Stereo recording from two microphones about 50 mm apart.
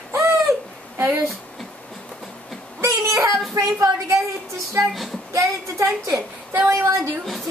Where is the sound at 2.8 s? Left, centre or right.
Right.